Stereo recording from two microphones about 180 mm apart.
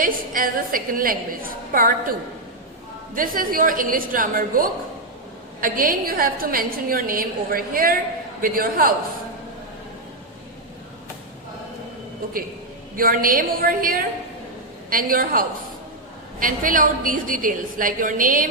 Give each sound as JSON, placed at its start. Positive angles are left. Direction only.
{"t": 0.0, "sound": "a woman's voice", "side_deg": -50}
{"t": 3.2, "sound": "a woman's voice", "side_deg": -50}
{"t": 13.0, "sound": "a woman's voice", "side_deg": -50}